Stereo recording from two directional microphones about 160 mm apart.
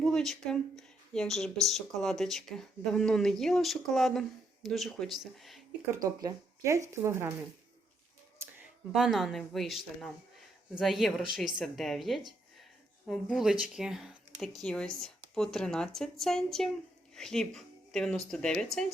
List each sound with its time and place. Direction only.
0.0 s speech: 5° left (ahead or behind)
6.2 s speech: 20° right (ahead or behind)
8.9 s speech: centre (ahead or behind)